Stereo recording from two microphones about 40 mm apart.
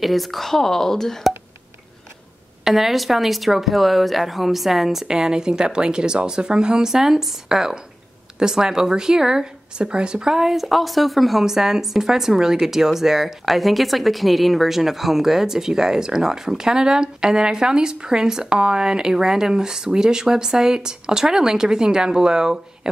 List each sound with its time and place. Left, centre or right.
0.0 s speech: centre
2.6 s speech: centre
5.0 s a woman's voice: centre
10.3 s a woman's voice: centre